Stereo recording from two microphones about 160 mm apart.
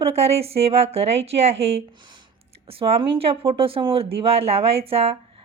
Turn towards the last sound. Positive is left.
turn(degrees=-40)  # may be behind; listen again after turning